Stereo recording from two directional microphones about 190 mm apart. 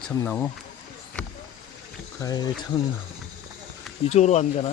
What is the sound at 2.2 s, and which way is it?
Speech, 20° left (ahead or behind).